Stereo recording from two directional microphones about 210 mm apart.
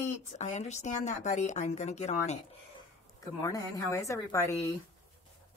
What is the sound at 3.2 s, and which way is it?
Speech, 15° left (ahead or behind).